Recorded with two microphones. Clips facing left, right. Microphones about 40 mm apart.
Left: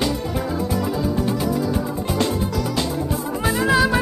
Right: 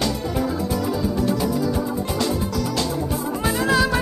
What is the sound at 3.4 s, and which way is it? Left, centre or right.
Music, centre.